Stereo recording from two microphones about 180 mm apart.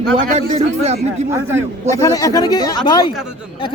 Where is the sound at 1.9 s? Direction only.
20° left (ahead or behind).